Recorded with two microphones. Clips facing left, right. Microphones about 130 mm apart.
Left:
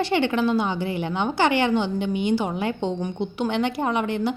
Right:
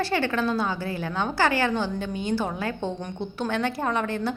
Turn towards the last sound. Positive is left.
turn(degrees=15)  # may be behind; listen again after turning